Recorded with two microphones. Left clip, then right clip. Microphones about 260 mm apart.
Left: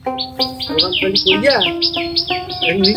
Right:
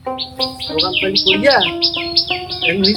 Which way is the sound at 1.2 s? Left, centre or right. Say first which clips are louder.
Right 1 dB; centre.